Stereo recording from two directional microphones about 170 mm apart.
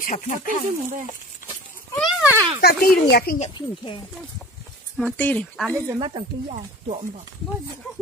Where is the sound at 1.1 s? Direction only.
20° left (ahead or behind).